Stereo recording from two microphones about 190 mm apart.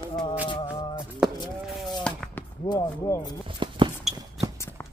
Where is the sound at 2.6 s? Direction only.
20° left (ahead or behind).